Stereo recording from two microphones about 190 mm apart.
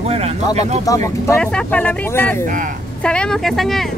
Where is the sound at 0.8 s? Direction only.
15° left (ahead or behind).